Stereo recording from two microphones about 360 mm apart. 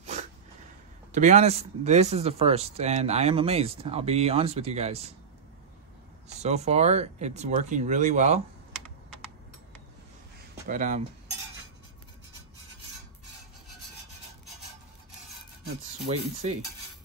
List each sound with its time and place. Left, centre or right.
0.0 s a sound: centre
1.1 s speech: centre
6.2 s speech: centre
10.7 s speech: right
16.1 s speech: centre